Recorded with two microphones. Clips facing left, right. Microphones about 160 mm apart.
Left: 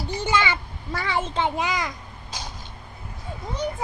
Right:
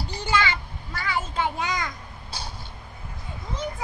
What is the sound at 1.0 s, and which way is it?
Speech, 25° left (ahead or behind).